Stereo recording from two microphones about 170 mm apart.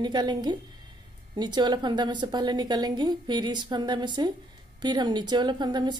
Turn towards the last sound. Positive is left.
turn(degrees=-25)  # may be behind; listen again after turning